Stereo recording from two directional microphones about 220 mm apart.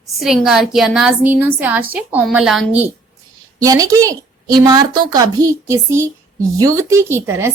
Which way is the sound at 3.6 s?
15° right (ahead or behind).